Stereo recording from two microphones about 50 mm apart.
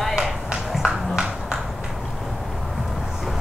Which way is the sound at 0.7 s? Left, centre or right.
Centre.